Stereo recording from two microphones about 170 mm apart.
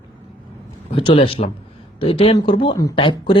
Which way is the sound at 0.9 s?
30° left (ahead or behind).